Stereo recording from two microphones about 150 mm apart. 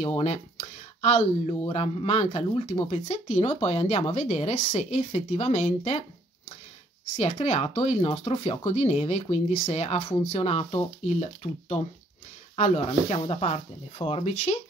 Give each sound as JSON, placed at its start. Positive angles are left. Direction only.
{"t": 0.0, "sound": "speech", "side_deg": 45}
{"t": 7.4, "sound": "speech", "side_deg": 45}